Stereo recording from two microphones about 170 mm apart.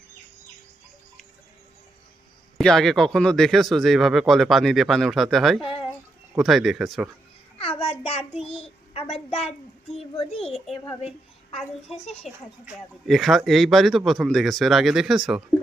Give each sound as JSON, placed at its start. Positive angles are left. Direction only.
{"t": 2.6, "sound": "speech", "side_deg": 0}
{"t": 7.6, "sound": "child singing", "side_deg": 35}
{"t": 9.9, "sound": "speech", "side_deg": 35}
{"t": 12.0, "sound": "speech", "side_deg": 40}
{"t": 13.1, "sound": "speech", "side_deg": 0}